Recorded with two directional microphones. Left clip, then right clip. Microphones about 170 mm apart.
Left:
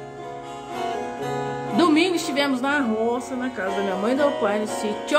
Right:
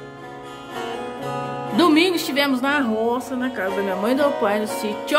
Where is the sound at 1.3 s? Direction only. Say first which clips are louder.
Right 1 dB; 10° right (ahead or behind).